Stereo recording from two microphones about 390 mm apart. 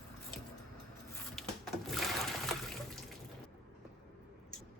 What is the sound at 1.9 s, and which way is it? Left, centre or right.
Water, centre.